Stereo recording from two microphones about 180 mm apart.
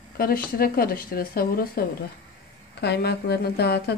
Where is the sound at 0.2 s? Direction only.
55° left (ahead or behind).